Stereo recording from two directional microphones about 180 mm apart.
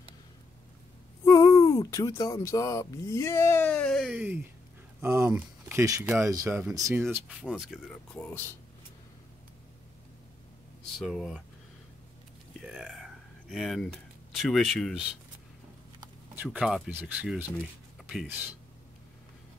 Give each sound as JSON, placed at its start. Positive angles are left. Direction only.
{"t": 1.2, "sound": "speech", "side_deg": 15}
{"t": 11.0, "sound": "speech", "side_deg": 0}
{"t": 12.5, "sound": "a sound", "side_deg": 0}
{"t": 14.4, "sound": "speech", "side_deg": 0}
{"t": 16.4, "sound": "speech", "side_deg": 0}